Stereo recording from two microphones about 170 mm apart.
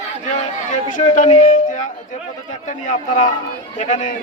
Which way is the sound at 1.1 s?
50° left (ahead or behind).